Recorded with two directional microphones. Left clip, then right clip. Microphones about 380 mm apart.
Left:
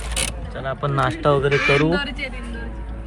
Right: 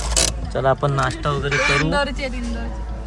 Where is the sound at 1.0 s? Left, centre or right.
Centre.